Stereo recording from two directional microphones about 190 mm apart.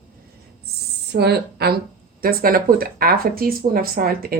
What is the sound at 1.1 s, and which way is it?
A woman's voice, 60° right (ahead or behind).